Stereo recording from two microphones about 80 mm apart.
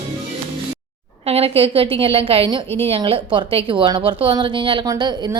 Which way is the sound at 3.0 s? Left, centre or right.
Right.